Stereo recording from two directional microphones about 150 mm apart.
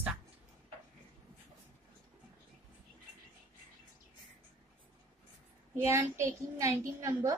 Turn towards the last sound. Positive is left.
turn(degrees=-20)  # may be behind; listen again after turning